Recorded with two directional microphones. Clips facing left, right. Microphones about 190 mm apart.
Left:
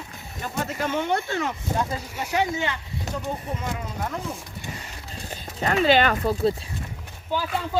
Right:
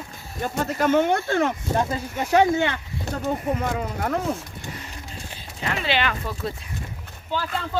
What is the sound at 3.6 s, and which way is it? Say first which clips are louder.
Speech: right 4 dB; 60° right (ahead or behind).